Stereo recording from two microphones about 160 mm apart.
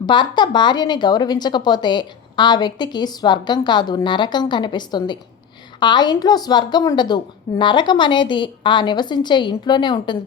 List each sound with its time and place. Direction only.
0.0 s a woman's voice: 30° left (ahead or behind)